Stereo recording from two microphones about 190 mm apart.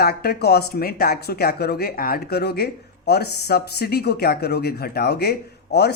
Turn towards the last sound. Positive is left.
turn(degrees=60)  # may be behind; listen again after turning